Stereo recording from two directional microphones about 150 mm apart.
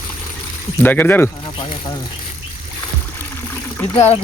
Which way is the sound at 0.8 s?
15° left (ahead or behind).